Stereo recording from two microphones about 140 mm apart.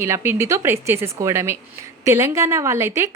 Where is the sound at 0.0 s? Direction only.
15° right (ahead or behind).